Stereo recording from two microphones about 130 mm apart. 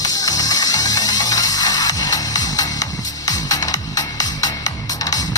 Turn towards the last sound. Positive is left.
turn(degrees=30)  # may be behind; listen again after turning